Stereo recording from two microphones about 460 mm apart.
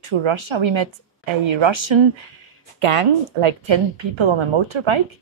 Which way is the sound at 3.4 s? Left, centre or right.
Right.